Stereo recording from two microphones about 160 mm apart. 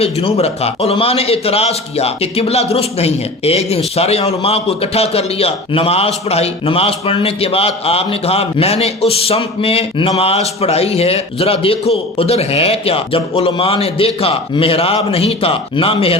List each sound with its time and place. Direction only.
0.0 s a man's voice: 35° left (ahead or behind)